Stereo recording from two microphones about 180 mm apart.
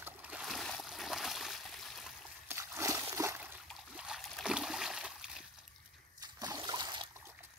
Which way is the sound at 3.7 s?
5° right (ahead or behind).